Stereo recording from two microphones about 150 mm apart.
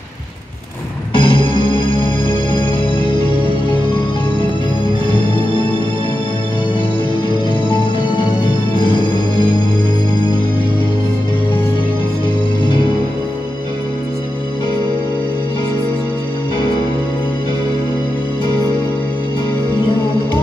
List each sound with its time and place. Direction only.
1.1 s music: 35° left (ahead or behind)
8.7 s music: 30° left (ahead or behind)